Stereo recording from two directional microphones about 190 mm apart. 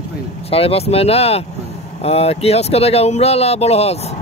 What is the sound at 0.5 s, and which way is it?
Speech, 30° left (ahead or behind).